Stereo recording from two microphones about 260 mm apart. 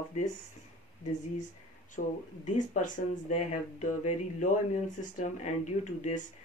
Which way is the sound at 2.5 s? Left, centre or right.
Left.